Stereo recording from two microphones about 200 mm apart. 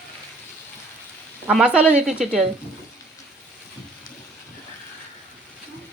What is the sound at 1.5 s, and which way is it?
Speech, centre (ahead or behind).